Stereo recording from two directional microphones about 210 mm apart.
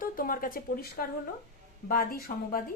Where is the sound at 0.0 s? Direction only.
40° left (ahead or behind).